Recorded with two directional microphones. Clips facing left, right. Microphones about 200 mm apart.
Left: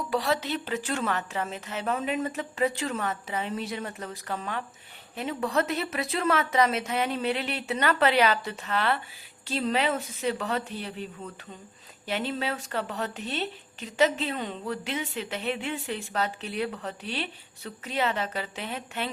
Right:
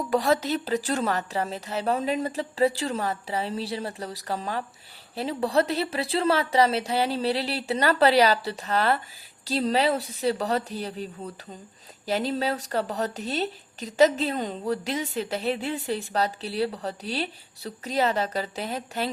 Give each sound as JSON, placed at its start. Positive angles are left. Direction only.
{"t": 0.1, "sound": "speech", "side_deg": -45}